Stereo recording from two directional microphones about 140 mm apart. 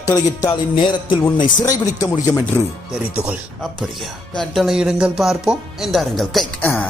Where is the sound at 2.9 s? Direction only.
10° right (ahead or behind).